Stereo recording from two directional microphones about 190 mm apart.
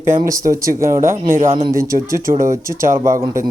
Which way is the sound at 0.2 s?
15° right (ahead or behind).